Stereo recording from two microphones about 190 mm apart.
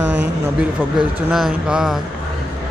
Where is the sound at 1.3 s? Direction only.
Centre (ahead or behind).